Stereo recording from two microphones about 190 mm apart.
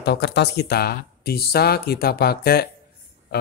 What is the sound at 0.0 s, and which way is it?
Speech, 60° left (ahead or behind).